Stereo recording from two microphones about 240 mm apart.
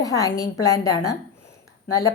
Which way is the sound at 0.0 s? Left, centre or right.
Centre.